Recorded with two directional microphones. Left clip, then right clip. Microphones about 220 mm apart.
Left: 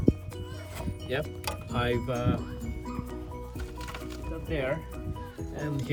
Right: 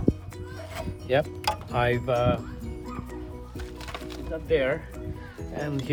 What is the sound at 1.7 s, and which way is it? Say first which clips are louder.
Speech: right 4 dB; 30° right (ahead or behind).